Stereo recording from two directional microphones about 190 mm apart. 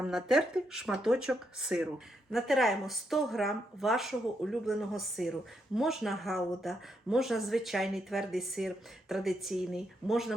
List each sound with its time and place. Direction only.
0.0 s speech: centre (ahead or behind)